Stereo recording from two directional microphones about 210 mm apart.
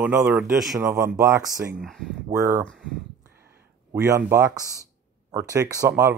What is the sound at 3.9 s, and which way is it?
Speech, 15° right (ahead or behind).